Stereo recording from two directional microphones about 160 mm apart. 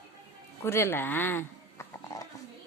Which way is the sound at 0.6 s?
15° left (ahead or behind).